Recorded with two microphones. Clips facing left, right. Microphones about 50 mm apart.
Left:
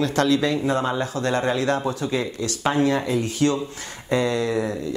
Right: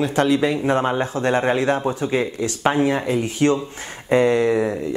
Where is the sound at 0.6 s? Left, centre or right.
Right.